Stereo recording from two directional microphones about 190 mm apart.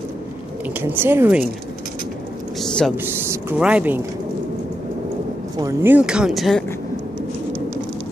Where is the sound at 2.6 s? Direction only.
Centre (ahead or behind).